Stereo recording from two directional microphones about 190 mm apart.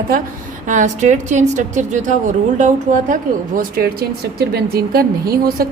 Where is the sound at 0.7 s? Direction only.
40° right (ahead or behind).